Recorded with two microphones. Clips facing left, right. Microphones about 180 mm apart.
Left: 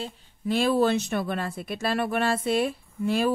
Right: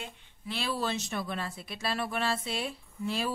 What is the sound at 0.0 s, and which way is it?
A woman's voice, 40° left (ahead or behind).